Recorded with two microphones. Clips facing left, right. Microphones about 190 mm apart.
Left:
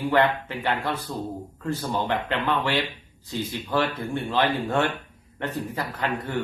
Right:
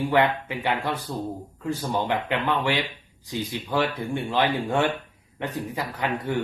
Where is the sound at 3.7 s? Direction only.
15° right (ahead or behind).